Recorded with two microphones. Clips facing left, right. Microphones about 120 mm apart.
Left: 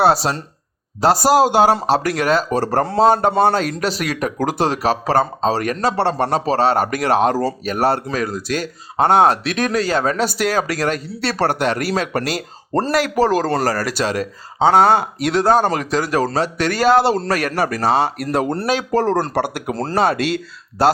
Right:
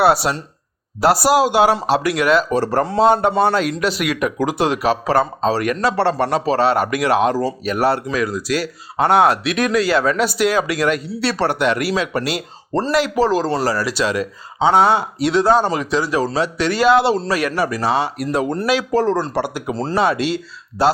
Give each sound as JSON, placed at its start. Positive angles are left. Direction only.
{"t": 0.0, "sound": "speech", "side_deg": 35}
{"t": 9.0, "sound": "speech", "side_deg": 35}